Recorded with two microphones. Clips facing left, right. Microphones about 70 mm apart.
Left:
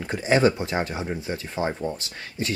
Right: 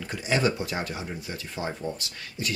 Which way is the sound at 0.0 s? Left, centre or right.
Left.